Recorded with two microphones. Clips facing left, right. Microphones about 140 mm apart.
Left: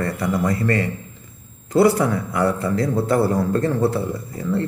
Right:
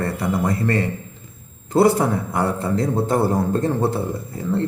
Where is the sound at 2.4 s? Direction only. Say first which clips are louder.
Left 2 dB; 25° right (ahead or behind).